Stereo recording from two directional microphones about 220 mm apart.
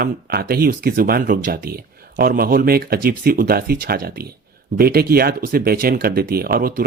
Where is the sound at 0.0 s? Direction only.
40° right (ahead or behind).